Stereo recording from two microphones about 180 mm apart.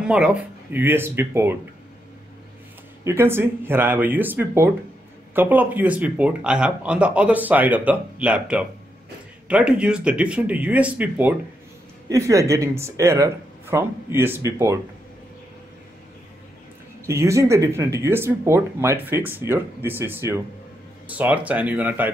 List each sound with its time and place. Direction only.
0.0 s speech: 5° right (ahead or behind)
3.0 s speech: 15° right (ahead or behind)
12.1 s speech: 20° right (ahead or behind)
17.0 s speech: 15° right (ahead or behind)